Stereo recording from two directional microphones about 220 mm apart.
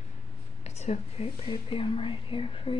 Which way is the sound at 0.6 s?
30° left (ahead or behind).